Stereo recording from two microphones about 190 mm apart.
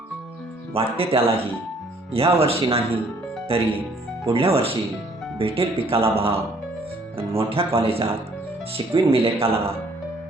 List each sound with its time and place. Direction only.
0.7 s speech: 30° right (ahead or behind)
4.3 s speech: 30° right (ahead or behind)